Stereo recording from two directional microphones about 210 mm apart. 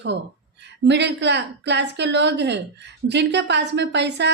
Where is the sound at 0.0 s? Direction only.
55° right (ahead or behind).